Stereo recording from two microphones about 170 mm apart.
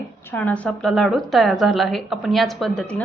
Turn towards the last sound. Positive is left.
turn(degrees=5)  # may be behind; listen again after turning